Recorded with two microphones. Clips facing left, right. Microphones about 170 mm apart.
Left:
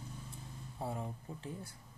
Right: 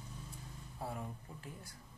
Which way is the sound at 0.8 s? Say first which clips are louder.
Left 3 dB; 25° left (ahead or behind).